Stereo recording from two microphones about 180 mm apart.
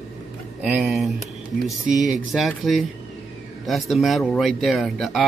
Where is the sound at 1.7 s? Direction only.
Centre (ahead or behind).